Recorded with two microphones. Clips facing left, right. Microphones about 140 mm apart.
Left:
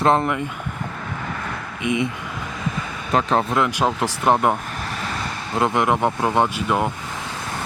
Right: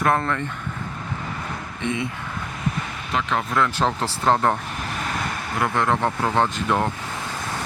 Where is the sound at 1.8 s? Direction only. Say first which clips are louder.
Left 4 dB; 15° left (ahead or behind).